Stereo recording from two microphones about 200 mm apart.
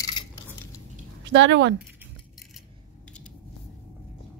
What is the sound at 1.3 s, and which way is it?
Speech, 65° right (ahead or behind).